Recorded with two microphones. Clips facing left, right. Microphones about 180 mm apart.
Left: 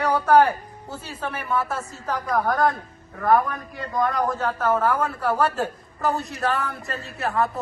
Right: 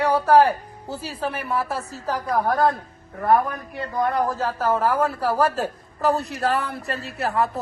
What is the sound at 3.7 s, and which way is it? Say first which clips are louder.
A man's voice: right 1 dB; 30° right (ahead or behind).